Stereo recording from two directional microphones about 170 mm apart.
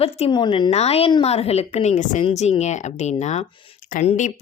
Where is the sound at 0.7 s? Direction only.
40° left (ahead or behind).